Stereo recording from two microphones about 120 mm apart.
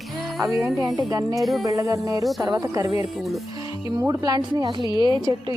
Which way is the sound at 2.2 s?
Centre (ahead or behind).